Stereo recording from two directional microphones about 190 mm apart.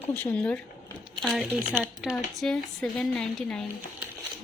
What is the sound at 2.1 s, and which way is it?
A woman's voice, 5° left (ahead or behind).